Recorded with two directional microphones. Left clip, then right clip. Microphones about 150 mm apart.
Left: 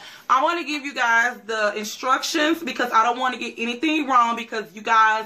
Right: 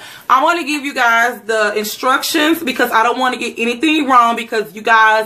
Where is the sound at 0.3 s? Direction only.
5° right (ahead or behind).